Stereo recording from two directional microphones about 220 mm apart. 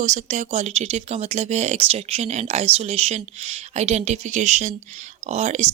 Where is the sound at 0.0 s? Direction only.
35° right (ahead or behind).